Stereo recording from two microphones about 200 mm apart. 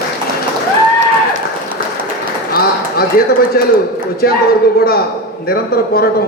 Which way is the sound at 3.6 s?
50° left (ahead or behind).